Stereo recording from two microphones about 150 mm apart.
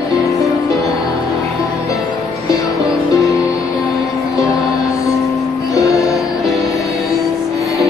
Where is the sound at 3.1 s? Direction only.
20° left (ahead or behind).